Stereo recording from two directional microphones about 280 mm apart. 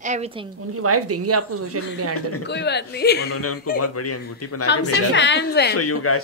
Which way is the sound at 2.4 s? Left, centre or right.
Left.